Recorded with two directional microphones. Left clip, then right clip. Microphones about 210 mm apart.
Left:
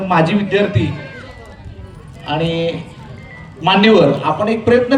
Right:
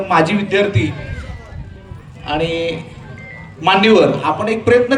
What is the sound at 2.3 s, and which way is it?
A man's voice, 25° right (ahead or behind).